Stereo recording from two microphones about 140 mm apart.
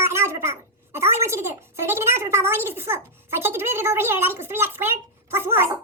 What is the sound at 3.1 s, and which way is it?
A woman's voice, 15° right (ahead or behind).